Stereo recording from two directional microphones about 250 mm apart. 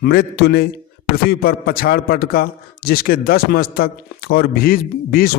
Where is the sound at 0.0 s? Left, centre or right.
Left.